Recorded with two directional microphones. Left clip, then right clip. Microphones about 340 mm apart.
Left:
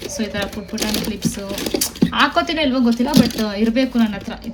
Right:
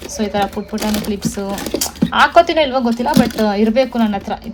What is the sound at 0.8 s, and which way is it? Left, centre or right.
Speech, right.